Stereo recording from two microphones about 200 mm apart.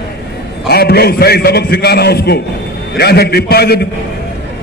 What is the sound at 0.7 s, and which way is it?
A man's voice, 50° left (ahead or behind).